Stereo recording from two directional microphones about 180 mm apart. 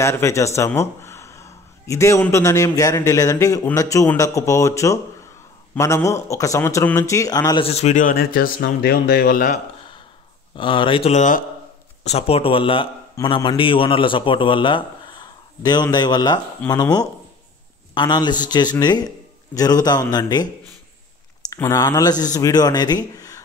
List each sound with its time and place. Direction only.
0.0 s a man's voice: 15° left (ahead or behind)
7.6 s speech: 35° left (ahead or behind)
10.5 s a man's voice: 25° left (ahead or behind)
21.5 s a man's voice: 20° left (ahead or behind)
23.1 s a sound: 20° left (ahead or behind)